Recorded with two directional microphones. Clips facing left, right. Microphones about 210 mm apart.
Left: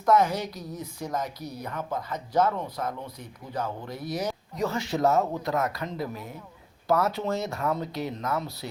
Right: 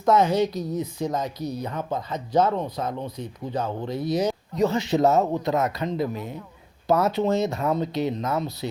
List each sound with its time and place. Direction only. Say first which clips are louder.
0.0 s a woman's voice: right 4 dB; 20° right (ahead or behind)